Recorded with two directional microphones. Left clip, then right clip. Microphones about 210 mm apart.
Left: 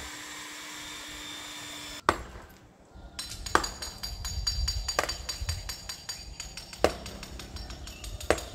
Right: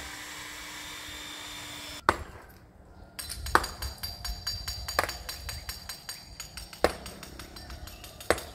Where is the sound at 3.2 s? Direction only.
35° right (ahead or behind).